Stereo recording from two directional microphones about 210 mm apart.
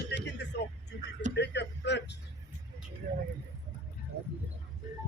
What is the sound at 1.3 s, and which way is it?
Speech, 55° left (ahead or behind).